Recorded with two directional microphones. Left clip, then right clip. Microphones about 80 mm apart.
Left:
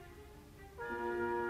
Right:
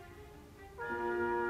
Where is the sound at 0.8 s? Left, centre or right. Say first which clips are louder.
Right 3 dB; right.